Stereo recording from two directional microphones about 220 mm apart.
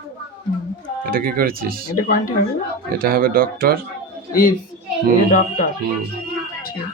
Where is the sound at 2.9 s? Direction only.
40° right (ahead or behind).